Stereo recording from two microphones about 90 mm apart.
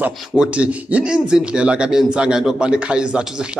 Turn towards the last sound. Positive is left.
turn(degrees=-10)  # may be behind; listen again after turning